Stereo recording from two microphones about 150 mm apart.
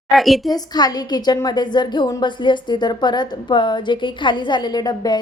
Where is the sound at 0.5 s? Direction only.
25° left (ahead or behind).